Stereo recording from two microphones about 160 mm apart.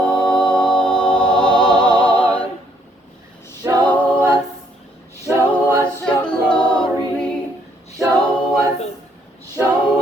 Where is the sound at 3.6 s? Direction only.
25° right (ahead or behind).